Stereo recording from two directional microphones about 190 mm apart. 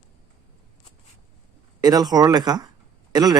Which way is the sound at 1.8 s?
20° right (ahead or behind).